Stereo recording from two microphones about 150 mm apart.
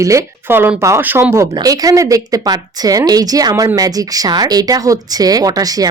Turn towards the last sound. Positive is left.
turn(degrees=-25)  # may be behind; listen again after turning